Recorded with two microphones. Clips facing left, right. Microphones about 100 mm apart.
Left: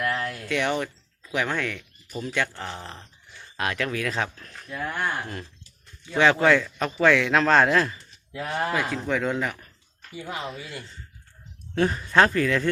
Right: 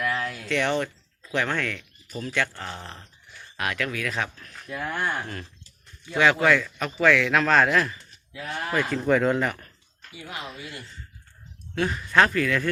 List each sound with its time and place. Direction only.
0.0 s a sound: centre (ahead or behind)
0.4 s speech: 15° left (ahead or behind); by 4.5 s 30° left (ahead or behind)
4.7 s speech: 5° right (ahead or behind)
6.1 s speech: 30° left (ahead or behind)
8.4 s speech: 45° left (ahead or behind)
8.7 s a man's voice: 5° left (ahead or behind)
10.1 s speech: 40° left (ahead or behind)
10.6 s speech: 25° left (ahead or behind)
11.7 s speech: 35° left (ahead or behind)